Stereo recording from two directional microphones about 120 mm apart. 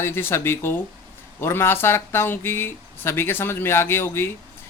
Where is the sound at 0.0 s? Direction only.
20° left (ahead or behind).